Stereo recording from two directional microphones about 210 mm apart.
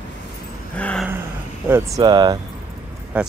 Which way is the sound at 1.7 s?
15° right (ahead or behind).